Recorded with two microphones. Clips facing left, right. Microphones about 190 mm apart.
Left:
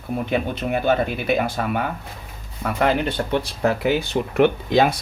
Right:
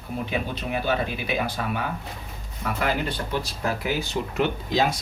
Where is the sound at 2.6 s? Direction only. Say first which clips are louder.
Left 6 dB; 60° left (ahead or behind).